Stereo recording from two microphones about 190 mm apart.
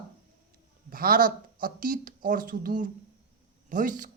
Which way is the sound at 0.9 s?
50° right (ahead or behind).